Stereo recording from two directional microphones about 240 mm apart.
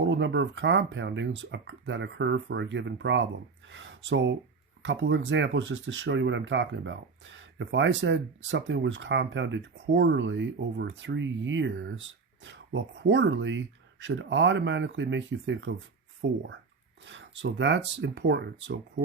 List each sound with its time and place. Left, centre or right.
0.0 s speech: right